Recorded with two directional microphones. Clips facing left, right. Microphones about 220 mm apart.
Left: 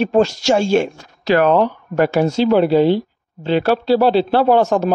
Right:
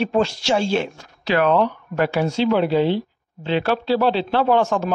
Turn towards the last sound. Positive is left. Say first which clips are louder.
# left 4 dB
turn(degrees=40)  # may be behind; listen again after turning